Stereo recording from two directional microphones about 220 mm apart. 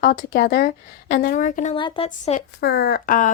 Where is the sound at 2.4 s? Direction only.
45° left (ahead or behind).